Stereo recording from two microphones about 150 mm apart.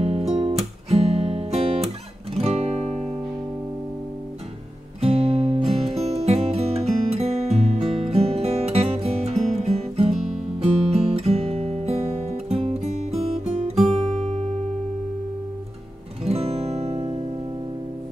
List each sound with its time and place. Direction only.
0.0 s music: 40° right (ahead or behind)
5.0 s music: 45° right (ahead or behind)
13.8 s guitar: 45° right (ahead or behind)
16.3 s music: 40° right (ahead or behind)